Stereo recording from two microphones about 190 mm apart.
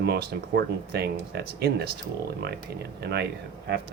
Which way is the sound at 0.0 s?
55° right (ahead or behind).